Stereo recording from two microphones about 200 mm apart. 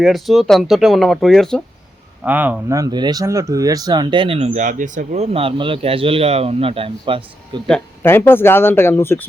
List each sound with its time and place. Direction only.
0.0 s speech: centre (ahead or behind)
2.2 s speech: 10° right (ahead or behind); by 7.6 s 25° right (ahead or behind)
7.7 s speech: 10° left (ahead or behind)